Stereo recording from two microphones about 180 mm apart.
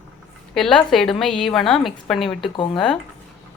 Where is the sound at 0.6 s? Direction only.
5° left (ahead or behind).